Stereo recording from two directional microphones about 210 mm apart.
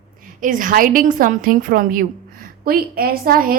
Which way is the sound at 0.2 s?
40° right (ahead or behind).